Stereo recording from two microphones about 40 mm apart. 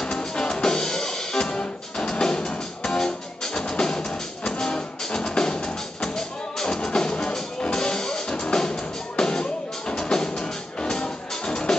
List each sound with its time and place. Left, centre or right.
0.0 s music: left